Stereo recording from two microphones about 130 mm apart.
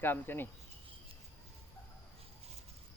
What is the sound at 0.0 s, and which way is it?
Speech, 15° left (ahead or behind).